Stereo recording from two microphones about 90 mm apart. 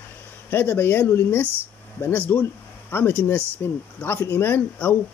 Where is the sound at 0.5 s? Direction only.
25° left (ahead or behind).